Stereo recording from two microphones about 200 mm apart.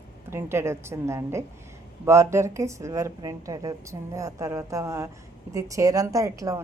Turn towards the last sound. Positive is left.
turn(degrees=-15)  # may be behind; listen again after turning